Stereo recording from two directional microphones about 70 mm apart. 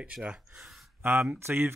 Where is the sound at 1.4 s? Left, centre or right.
Right.